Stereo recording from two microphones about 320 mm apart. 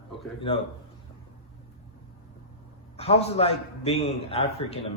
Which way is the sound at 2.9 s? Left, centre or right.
Centre.